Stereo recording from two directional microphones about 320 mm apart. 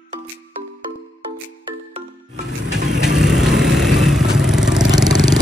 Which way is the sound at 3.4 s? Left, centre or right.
Centre.